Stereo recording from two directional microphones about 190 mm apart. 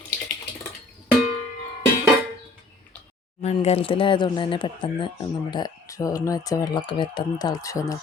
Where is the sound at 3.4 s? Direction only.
35° left (ahead or behind).